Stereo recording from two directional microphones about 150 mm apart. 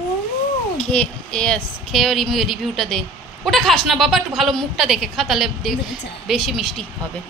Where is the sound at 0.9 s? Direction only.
5° left (ahead or behind).